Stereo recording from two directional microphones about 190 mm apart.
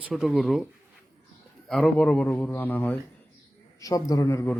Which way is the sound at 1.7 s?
5° left (ahead or behind).